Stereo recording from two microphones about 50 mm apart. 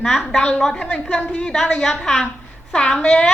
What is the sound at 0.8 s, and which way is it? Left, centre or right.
Speech, left.